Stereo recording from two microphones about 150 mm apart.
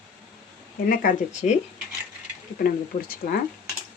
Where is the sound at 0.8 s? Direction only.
70° left (ahead or behind).